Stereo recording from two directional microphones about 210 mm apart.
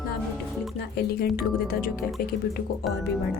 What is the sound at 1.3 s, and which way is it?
Speech, 45° left (ahead or behind).